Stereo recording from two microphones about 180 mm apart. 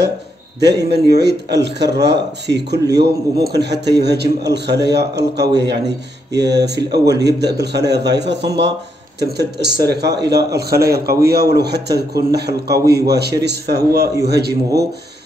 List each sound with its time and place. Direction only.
0.6 s a man's voice: 70° right (ahead or behind)